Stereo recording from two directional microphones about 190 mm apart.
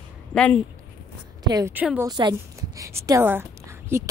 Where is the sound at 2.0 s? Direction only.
20° right (ahead or behind).